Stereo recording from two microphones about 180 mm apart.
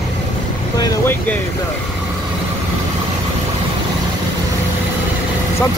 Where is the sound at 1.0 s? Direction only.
10° left (ahead or behind).